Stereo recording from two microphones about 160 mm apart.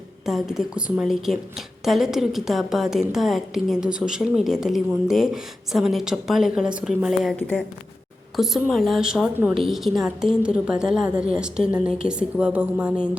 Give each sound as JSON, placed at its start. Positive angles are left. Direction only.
{"t": 0.3, "sound": "a woman's voice", "side_deg": 0}
{"t": 8.4, "sound": "a woman's voice", "side_deg": 0}